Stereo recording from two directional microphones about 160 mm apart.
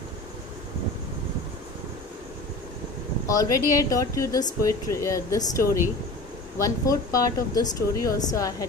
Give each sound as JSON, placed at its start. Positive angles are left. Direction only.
{"t": 3.2, "sound": "speech", "side_deg": 20}